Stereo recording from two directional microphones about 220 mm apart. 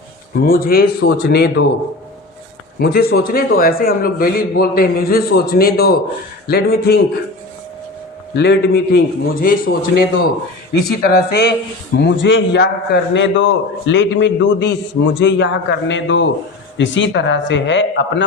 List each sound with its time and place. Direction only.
0.4 s a man's voice: 40° left (ahead or behind)
2.7 s a man's voice: 45° left (ahead or behind)
8.4 s a man's voice: 50° left (ahead or behind)